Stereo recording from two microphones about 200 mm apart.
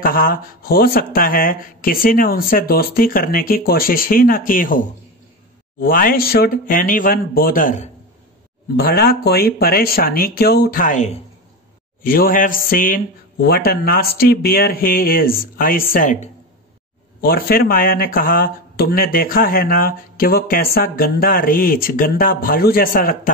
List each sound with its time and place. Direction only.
0.0 s speech: 45° left (ahead or behind)
8.7 s speech: 50° left (ahead or behind)